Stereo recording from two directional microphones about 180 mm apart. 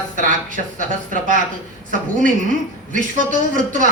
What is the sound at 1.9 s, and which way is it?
A man's voice, 45° right (ahead or behind).